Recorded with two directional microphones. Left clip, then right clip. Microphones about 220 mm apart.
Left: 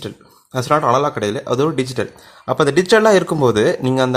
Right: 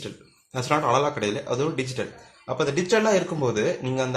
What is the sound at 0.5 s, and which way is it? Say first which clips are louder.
Speech: left 7 dB; 35° left (ahead or behind).